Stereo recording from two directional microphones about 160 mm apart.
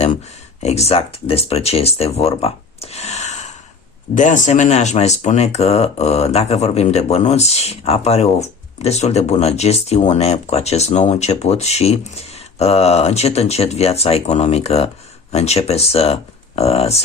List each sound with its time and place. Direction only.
0.6 s speech: 40° left (ahead or behind)
2.3 s a sound: 40° left (ahead or behind)
4.1 s speech: 50° left (ahead or behind)